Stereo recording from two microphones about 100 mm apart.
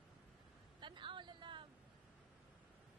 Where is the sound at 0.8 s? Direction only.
50° right (ahead or behind).